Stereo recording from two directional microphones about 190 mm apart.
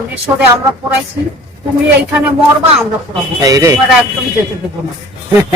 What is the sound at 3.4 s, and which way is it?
Speech, 15° right (ahead or behind).